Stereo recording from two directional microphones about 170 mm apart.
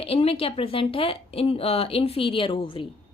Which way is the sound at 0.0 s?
35° left (ahead or behind).